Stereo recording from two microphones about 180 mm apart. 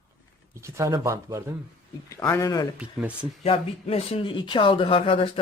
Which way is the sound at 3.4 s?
35° left (ahead or behind).